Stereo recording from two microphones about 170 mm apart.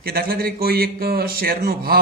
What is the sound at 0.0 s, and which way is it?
A man's voice, 65° right (ahead or behind).